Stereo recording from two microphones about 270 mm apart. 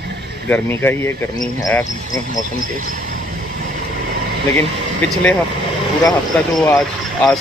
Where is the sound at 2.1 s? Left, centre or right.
Right.